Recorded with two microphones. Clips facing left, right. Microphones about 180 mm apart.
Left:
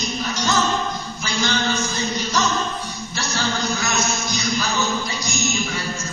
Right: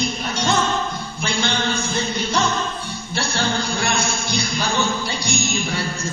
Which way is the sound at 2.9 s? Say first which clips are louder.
Right 2 dB; 30° right (ahead or behind).